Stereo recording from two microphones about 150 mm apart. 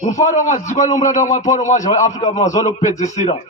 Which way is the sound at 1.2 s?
55° left (ahead or behind).